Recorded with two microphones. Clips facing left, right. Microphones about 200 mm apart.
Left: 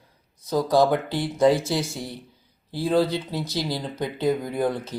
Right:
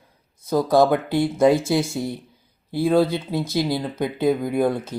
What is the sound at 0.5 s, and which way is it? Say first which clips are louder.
Speech: right 3 dB; 50° right (ahead or behind).